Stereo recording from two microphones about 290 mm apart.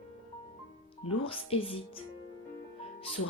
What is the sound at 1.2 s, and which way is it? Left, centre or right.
Speech, centre.